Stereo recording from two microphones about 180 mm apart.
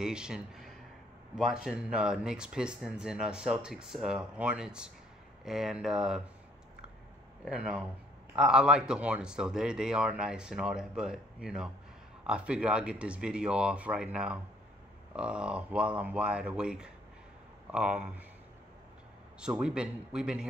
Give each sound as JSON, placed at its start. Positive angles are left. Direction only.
{"t": 0.0, "sound": "a sound", "side_deg": -5}
{"t": 1.3, "sound": "speech", "side_deg": -5}
{"t": 7.4, "sound": "speech", "side_deg": -5}
{"t": 19.4, "sound": "speech", "side_deg": -5}